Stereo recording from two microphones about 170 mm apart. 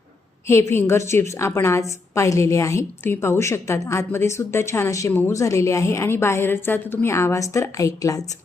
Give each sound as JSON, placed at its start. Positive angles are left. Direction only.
{"t": 0.4, "sound": "a woman's voice", "side_deg": 15}